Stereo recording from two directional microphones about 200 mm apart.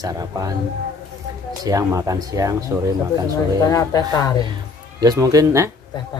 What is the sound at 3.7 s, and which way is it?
Speech, 20° left (ahead or behind).